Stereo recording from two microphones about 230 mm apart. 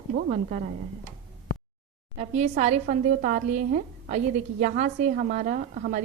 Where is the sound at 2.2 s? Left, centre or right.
Right.